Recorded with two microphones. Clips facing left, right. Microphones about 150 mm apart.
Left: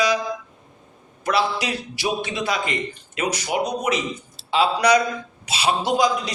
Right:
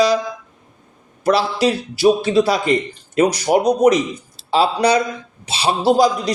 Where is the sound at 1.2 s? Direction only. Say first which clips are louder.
Right 6 dB; 35° right (ahead or behind).